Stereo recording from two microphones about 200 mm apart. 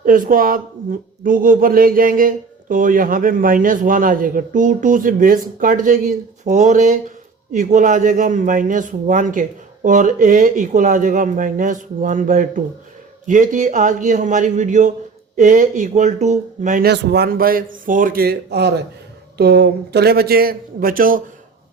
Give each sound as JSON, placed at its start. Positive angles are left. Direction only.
{"t": 0.0, "sound": "a man's voice", "side_deg": -45}